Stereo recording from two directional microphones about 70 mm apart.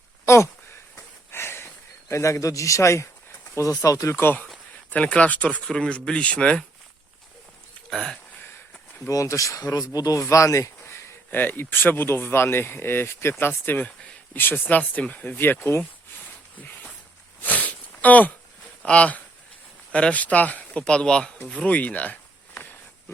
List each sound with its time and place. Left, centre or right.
0.3 s a sound: left
3.5 s speech: left
4.1 s speech: left
4.9 s speech: centre
7.9 s speech: centre
9.0 s speech: left
11.3 s speech: left
16.6 s a sound: left
17.4 s sniff: left
18.9 s speech: centre
21.5 s a sound: centre